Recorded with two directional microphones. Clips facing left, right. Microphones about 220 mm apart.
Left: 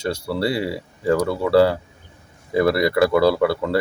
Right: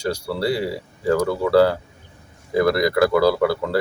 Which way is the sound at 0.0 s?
Centre (ahead or behind).